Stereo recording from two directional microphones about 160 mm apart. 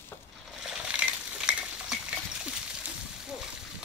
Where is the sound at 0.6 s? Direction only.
5° right (ahead or behind).